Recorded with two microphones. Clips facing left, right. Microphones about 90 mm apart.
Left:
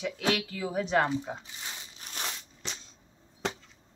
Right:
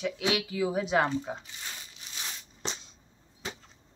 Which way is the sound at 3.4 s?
75° left (ahead or behind).